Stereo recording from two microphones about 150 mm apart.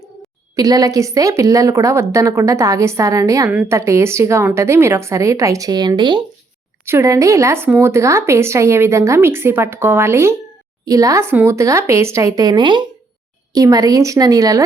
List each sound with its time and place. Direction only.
0.5 s a woman's voice: 25° right (ahead or behind)
3.5 s speech: 10° right (ahead or behind)
3.8 s a woman's voice: 20° right (ahead or behind)
6.8 s a woman's voice: 20° right (ahead or behind)